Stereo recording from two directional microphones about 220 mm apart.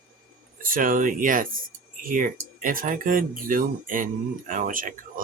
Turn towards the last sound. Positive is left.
turn(degrees=-40)  # may be behind; listen again after turning